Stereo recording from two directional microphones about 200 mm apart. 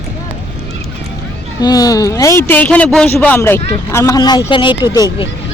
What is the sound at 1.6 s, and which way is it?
Speech, 20° left (ahead or behind).